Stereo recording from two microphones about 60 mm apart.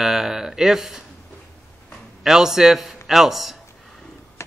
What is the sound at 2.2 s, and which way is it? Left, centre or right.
A man's voice, centre.